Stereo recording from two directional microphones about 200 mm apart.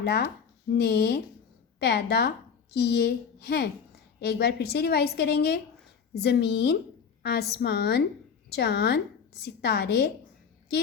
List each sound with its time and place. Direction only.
0.0 s a woman's voice: 55° left (ahead or behind)